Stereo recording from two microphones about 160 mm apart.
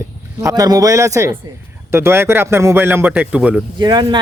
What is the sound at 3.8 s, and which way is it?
Speech, 30° right (ahead or behind).